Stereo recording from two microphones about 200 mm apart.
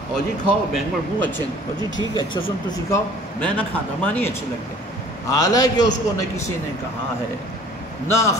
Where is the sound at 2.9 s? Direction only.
10° left (ahead or behind).